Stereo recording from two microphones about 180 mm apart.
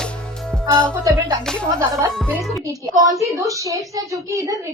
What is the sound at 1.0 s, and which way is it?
Speech, 15° right (ahead or behind).